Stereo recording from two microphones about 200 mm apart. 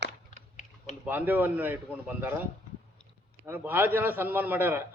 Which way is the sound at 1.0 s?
10° right (ahead or behind).